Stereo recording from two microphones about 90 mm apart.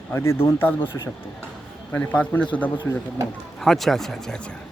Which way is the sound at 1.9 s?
15° left (ahead or behind).